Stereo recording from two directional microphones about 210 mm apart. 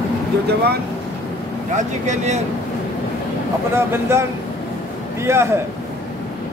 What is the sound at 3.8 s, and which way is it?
Speech, 10° right (ahead or behind).